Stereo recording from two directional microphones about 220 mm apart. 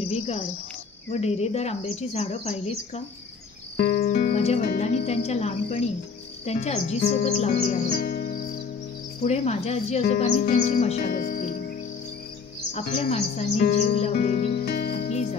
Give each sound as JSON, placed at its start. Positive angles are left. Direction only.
{"t": 0.0, "sound": "cricket", "side_deg": 25}
{"t": 1.1, "sound": "speech", "side_deg": 30}
{"t": 3.7, "sound": "music", "side_deg": 45}
{"t": 4.3, "sound": "speech", "side_deg": 30}
{"t": 7.9, "sound": "music", "side_deg": 40}
{"t": 9.2, "sound": "speech", "side_deg": 30}
{"t": 11.2, "sound": "cricket", "side_deg": 40}
{"t": 12.7, "sound": "speech", "side_deg": 30}
{"t": 14.6, "sound": "music", "side_deg": 45}